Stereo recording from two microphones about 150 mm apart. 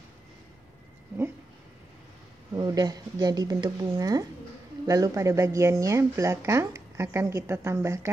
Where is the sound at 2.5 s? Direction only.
25° right (ahead or behind).